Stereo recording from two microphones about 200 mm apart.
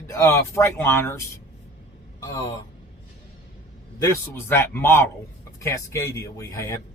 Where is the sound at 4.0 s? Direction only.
10° left (ahead or behind).